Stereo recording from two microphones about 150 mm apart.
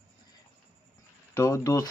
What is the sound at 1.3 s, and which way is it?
Speech, 20° left (ahead or behind).